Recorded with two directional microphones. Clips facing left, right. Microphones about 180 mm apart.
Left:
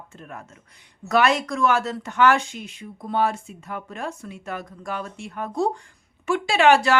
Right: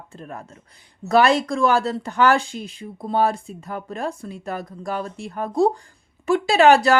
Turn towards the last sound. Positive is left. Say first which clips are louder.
# right 3 dB
turn(degrees=-40)  # may be behind; listen again after turning